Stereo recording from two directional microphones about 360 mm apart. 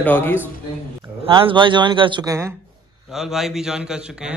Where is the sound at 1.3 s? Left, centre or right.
Centre.